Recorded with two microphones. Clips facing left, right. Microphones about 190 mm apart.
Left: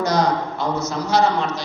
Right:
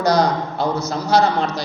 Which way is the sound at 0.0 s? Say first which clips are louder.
Right 2 dB; 35° right (ahead or behind).